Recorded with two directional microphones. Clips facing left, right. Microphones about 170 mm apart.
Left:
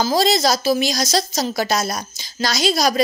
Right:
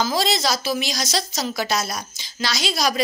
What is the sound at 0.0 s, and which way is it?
A woman's voice, 40° left (ahead or behind).